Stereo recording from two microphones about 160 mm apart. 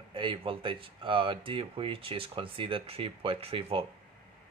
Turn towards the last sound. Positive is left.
turn(degrees=-35)  # may be behind; listen again after turning